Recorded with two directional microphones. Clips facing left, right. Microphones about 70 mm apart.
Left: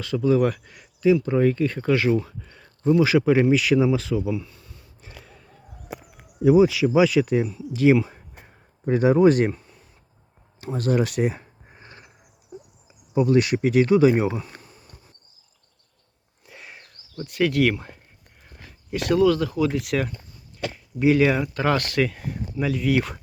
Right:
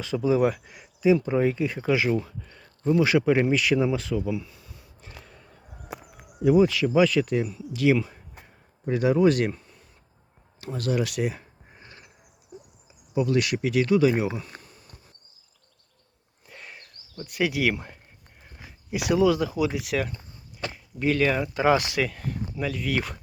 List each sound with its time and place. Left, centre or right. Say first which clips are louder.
0.0 s speech: left 2 dB; centre
4.3 s a sound: left 2 dB; centre
6.4 s speech: left 3 dB; centre
7.7 s speech: left 4 dB; left
9.5 s a sound: left 3 dB; centre
10.6 s a sound: left 4 dB; left
13.1 s speech: left 5 dB; left
16.5 s a sound: left 1 dB; centre
17.2 s speech: left 4 dB; centre
21.0 s speech: left 5 dB; centre
21.4 s speech: right 1 dB; centre
22.0 s speech: left 3 dB; centre